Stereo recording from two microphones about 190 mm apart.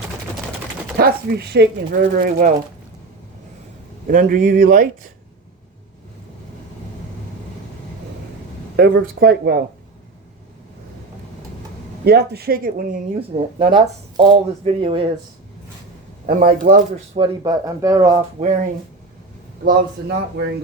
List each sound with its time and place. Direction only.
0.9 s speech: 55° right (ahead or behind)
4.0 s speech: 45° right (ahead or behind)
8.7 s speech: 55° right (ahead or behind)
12.0 s speech: 55° right (ahead or behind)
13.1 s speech: 30° right (ahead or behind)
16.2 s speech: 45° right (ahead or behind)
17.2 s speech: 20° right (ahead or behind)
18.4 s speech: 40° right (ahead or behind)
19.6 s speech: 55° right (ahead or behind)